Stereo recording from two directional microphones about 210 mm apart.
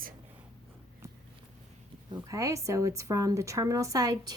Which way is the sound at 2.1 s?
15° right (ahead or behind).